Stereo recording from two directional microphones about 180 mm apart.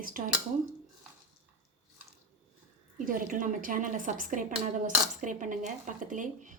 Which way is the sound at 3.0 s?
50° right (ahead or behind).